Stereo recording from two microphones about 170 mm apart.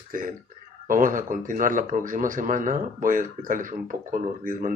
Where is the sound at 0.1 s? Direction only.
55° right (ahead or behind).